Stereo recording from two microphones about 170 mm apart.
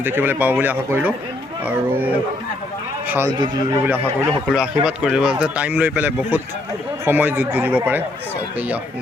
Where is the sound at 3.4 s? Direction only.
25° right (ahead or behind).